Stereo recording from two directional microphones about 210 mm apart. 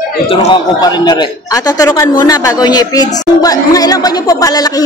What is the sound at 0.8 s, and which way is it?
A man's voice, 20° left (ahead or behind).